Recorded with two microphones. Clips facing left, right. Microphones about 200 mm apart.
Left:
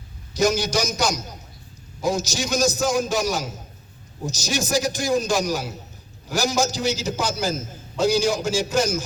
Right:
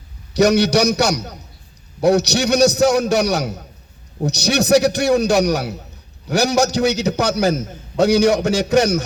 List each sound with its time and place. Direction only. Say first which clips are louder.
0.3 s a man's voice: right 7 dB; 70° right (ahead or behind)